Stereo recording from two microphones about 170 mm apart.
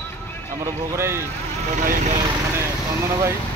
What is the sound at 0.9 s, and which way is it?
Speech, 15° right (ahead or behind).